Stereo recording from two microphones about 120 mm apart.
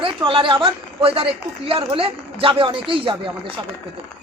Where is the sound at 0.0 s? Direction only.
50° right (ahead or behind).